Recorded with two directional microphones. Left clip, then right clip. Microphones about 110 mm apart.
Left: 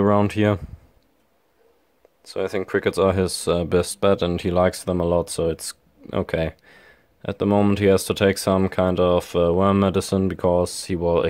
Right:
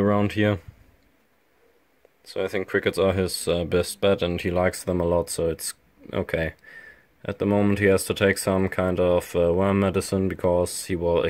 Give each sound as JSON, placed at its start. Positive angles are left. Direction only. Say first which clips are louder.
{"t": 0.0, "sound": "speech", "louder": "left 3 dB", "side_deg": 25}
{"t": 2.2, "sound": "speech", "louder": "left 2 dB", "side_deg": 20}